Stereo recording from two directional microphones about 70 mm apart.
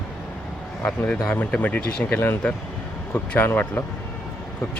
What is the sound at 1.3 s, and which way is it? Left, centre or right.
Speech, left.